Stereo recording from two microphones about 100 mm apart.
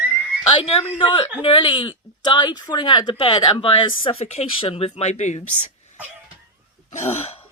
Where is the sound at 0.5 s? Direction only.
75° left (ahead or behind).